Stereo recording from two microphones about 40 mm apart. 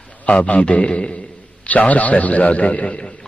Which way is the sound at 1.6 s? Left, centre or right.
Left.